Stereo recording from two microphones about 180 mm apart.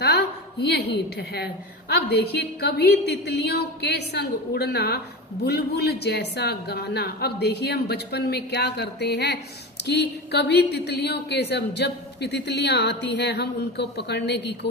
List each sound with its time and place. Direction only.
0.0 s a woman's voice: 65° left (ahead or behind)